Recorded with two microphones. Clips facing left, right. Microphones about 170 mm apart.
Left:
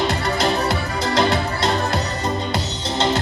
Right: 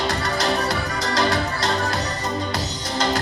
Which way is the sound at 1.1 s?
25° left (ahead or behind).